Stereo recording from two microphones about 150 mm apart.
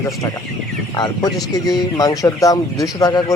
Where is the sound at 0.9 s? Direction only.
30° left (ahead or behind).